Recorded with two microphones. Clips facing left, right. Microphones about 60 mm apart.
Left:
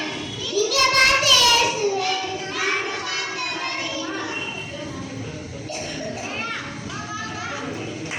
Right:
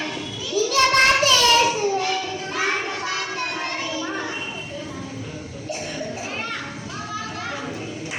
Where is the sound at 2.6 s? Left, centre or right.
Right.